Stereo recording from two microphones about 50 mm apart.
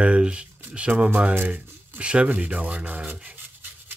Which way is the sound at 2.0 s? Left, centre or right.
Right.